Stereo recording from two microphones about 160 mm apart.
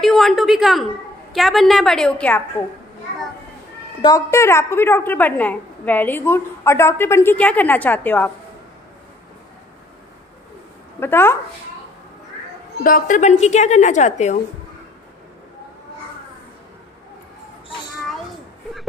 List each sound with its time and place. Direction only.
0.0 s a woman's voice: centre (ahead or behind)
4.0 s a woman's voice: 20° left (ahead or behind)
11.0 s a woman's voice: 15° left (ahead or behind)
12.8 s a woman's voice: 55° left (ahead or behind)